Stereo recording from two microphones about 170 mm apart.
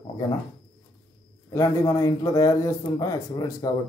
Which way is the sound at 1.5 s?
15° left (ahead or behind).